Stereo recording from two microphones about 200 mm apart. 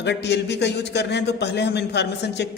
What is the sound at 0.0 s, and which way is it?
A man's voice, 60° left (ahead or behind).